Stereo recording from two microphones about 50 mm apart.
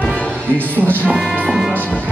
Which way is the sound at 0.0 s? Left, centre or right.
Left.